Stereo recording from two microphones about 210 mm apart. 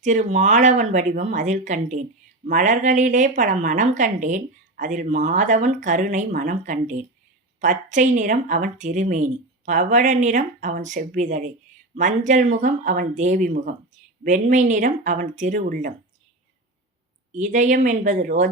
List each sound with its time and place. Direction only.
0.0 s speech: 35° right (ahead or behind)
17.3 s speech: 35° right (ahead or behind)